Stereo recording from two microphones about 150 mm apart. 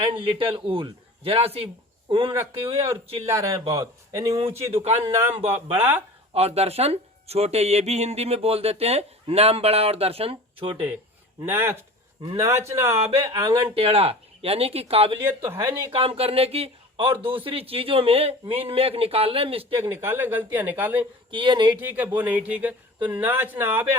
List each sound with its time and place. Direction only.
0.0 s a man's voice: 35° right (ahead or behind)
3.2 s speech: 20° right (ahead or behind)
4.4 s speech: 40° right (ahead or behind)
5.0 s speech: 15° right (ahead or behind)
6.3 s speech: 45° right (ahead or behind)
11.4 s speech: 15° right (ahead or behind); by 15.2 s 40° right (ahead or behind)
15.2 s speech: 15° right (ahead or behind)
15.9 s speech: 40° right (ahead or behind)
19.8 s speech: 15° right (ahead or behind)
21.2 s speech: 35° right (ahead or behind)
21.7 s speech: 10° right (ahead or behind)